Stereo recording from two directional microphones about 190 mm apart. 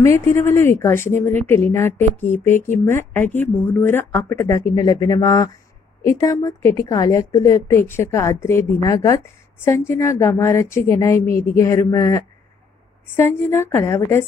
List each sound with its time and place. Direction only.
0.0 s a woman's voice: 15° left (ahead or behind)